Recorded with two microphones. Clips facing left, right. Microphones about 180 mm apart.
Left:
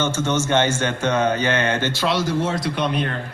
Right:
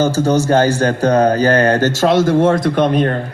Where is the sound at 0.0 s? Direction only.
35° right (ahead or behind).